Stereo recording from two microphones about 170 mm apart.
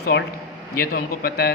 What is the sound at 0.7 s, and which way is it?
Speech, 60° left (ahead or behind).